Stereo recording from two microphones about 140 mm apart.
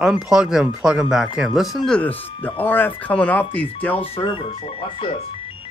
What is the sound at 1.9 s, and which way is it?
Speech, 10° left (ahead or behind).